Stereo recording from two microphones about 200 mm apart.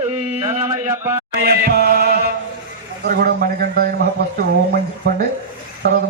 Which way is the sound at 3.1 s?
50° right (ahead or behind).